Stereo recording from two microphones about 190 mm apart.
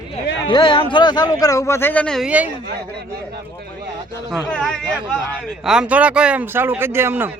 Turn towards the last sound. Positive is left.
turn(degrees=-10)  # may be behind; listen again after turning